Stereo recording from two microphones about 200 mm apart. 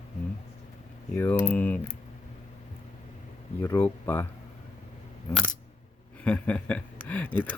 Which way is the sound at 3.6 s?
15° left (ahead or behind).